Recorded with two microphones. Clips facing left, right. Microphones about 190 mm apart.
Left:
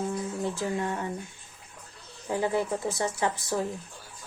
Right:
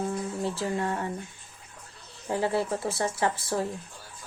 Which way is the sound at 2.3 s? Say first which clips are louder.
Even; 15° left (ahead or behind).